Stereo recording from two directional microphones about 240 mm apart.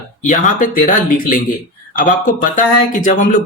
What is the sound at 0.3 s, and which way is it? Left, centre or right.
Speech, left.